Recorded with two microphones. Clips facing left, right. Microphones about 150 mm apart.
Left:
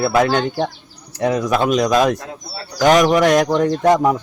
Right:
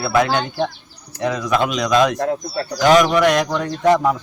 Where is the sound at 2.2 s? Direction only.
65° right (ahead or behind).